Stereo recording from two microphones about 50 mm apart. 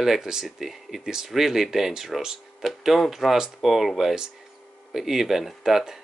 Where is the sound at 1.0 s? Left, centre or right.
Centre.